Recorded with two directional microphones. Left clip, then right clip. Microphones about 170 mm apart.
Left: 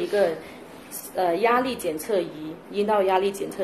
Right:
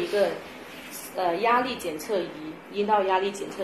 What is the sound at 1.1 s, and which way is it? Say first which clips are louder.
A woman's voice: left 2 dB; 40° left (ahead or behind).